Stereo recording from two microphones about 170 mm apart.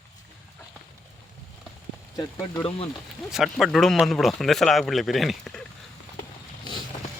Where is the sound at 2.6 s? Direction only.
35° left (ahead or behind).